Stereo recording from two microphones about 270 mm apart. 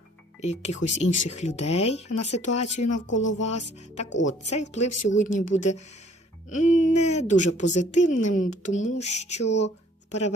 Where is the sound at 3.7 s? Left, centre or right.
Left.